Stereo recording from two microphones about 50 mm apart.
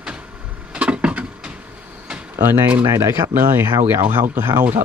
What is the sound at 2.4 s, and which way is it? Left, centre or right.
Speech, right.